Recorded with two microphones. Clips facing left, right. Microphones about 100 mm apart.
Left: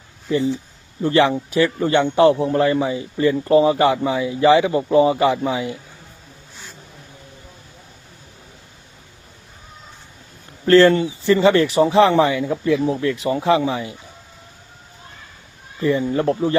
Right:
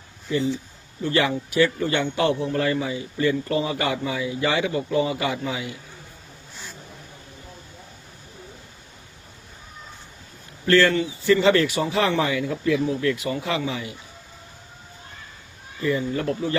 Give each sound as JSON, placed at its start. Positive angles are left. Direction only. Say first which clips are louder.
{"t": 0.3, "sound": "a man's voice", "louder": "left 4 dB", "side_deg": 30}
{"t": 10.7, "sound": "a man's voice", "louder": "left 6 dB", "side_deg": 35}
{"t": 15.8, "sound": "a man's voice", "louder": "left 5 dB", "side_deg": 30}